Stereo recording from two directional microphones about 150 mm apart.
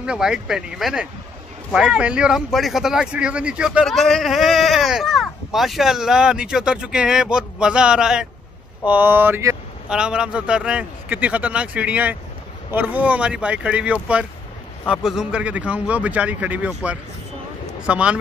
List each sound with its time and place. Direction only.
0.0 s a man's voice: 5° right (ahead or behind)
9.8 s a man's voice: 5° right (ahead or behind)